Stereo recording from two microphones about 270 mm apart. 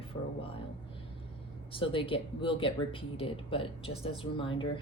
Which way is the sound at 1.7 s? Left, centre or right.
Centre.